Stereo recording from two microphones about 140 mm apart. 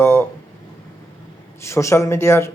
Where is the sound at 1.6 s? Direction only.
20° left (ahead or behind).